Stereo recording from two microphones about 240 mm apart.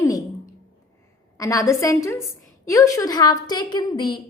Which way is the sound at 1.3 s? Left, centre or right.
Centre.